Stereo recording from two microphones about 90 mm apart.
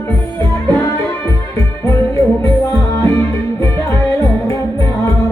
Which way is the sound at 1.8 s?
30° left (ahead or behind).